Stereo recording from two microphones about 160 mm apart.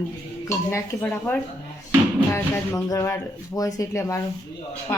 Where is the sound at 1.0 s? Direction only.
10° left (ahead or behind).